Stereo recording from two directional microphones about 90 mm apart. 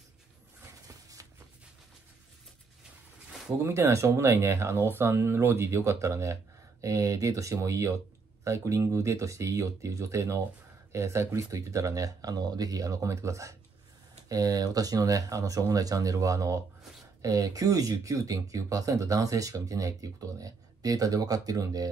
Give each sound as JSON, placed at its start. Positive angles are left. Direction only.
{"t": 3.6, "sound": "speech", "side_deg": -30}